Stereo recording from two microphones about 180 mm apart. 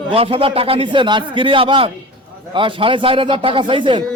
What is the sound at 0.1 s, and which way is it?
A man's voice, 30° right (ahead or behind).